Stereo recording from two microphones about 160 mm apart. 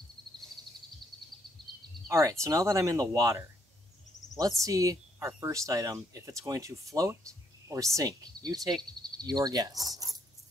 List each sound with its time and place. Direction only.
2.0 s speech: 20° right (ahead or behind)